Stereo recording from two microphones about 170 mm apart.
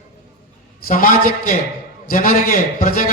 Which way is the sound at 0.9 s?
55° left (ahead or behind).